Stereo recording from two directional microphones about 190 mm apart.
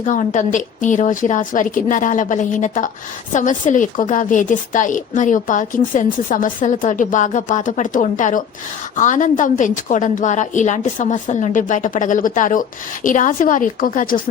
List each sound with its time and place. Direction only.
0.0 s a woman's voice: 40° left (ahead or behind)